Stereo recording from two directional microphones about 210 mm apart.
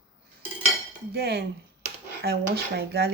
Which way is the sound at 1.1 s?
50° right (ahead or behind).